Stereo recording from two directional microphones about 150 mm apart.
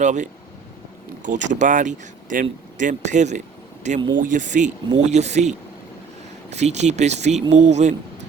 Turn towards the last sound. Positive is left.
turn(degrees=-50)  # may be behind; listen again after turning